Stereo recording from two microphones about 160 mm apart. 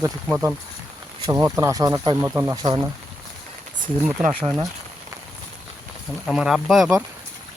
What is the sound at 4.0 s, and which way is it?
Speech, 10° right (ahead or behind).